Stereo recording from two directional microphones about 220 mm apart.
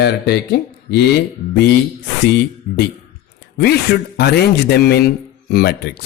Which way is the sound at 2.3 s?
45° left (ahead or behind).